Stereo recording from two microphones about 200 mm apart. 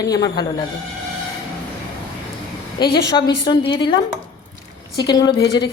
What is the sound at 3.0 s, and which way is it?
Speech, 20° left (ahead or behind).